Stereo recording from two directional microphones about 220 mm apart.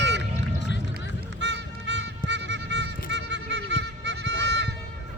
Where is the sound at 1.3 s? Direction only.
55° right (ahead or behind).